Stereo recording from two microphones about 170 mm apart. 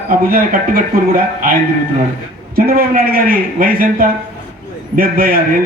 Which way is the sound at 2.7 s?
60° right (ahead or behind).